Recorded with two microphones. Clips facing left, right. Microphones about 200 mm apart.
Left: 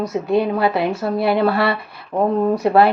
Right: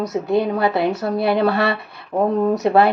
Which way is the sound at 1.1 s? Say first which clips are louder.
Left 2 dB; 25° right (ahead or behind).